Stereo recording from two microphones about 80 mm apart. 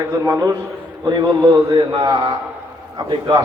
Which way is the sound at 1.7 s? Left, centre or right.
Right.